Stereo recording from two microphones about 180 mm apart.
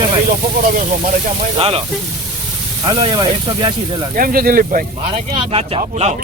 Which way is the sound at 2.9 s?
25° right (ahead or behind).